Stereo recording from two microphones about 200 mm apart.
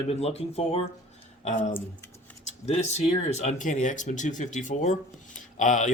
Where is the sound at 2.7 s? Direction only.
35° left (ahead or behind).